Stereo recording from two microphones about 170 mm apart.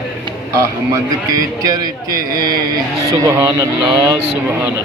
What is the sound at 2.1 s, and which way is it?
Speech, 60° right (ahead or behind).